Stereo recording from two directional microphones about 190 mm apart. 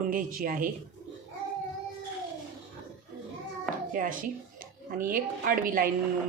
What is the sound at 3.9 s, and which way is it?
A woman's voice, 45° right (ahead or behind).